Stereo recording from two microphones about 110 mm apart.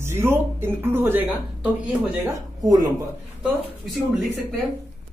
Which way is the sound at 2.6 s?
35° right (ahead or behind).